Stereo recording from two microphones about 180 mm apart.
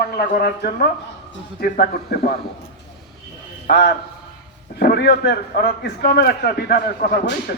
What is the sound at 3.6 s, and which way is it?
A man's voice, 65° left (ahead or behind).